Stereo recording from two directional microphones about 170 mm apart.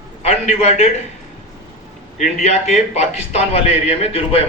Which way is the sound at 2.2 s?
40° left (ahead or behind).